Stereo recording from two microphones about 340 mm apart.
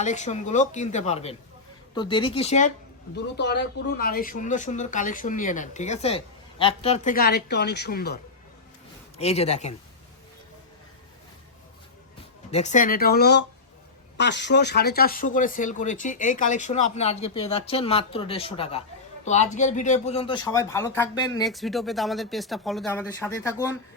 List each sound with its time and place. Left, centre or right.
0.0 s speech: left
9.1 s speech: centre
12.5 s speech: centre